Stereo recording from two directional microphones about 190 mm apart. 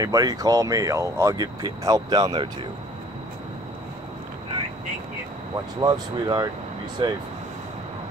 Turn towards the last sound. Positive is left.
turn(degrees=-25)  # may be behind; listen again after turning